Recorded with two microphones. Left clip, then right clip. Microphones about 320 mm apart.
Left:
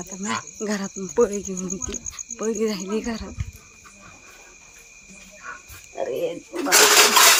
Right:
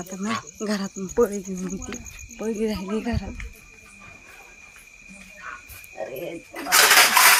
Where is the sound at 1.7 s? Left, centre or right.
Left.